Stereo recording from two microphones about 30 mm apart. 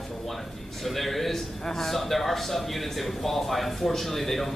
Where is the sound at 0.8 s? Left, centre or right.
Centre.